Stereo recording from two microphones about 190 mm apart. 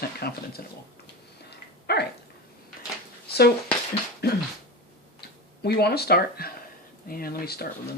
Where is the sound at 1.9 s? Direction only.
60° left (ahead or behind).